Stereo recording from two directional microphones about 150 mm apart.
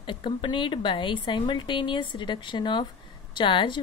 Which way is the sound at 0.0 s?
35° left (ahead or behind).